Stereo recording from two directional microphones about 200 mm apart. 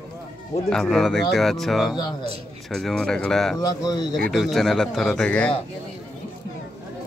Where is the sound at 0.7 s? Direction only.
Centre (ahead or behind).